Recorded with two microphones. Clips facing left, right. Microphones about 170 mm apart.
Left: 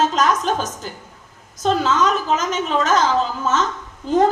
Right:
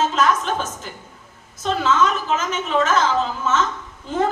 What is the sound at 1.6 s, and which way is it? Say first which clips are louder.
A woman's voice: left 1 dB; 40° left (ahead or behind).